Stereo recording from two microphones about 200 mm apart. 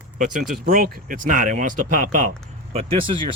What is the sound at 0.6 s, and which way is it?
Speech, 45° right (ahead or behind).